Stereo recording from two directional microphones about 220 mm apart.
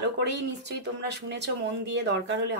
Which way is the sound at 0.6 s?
50° right (ahead or behind).